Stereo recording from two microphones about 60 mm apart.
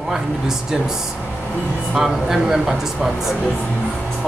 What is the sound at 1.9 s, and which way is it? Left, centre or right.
Speech, centre.